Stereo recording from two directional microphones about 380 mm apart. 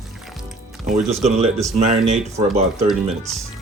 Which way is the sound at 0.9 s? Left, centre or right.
Centre.